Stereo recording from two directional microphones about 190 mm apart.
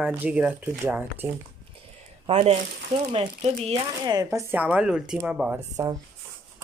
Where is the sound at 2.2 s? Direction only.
30° right (ahead or behind).